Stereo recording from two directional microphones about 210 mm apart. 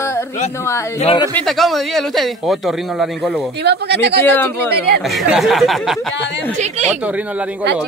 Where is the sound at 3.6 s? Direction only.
50° right (ahead or behind).